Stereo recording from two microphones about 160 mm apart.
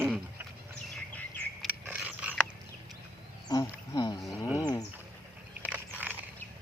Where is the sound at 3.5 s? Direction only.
25° left (ahead or behind).